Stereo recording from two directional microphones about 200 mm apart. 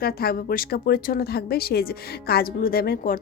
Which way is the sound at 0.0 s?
50° left (ahead or behind).